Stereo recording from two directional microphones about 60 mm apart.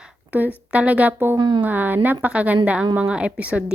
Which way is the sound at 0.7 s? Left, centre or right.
Right.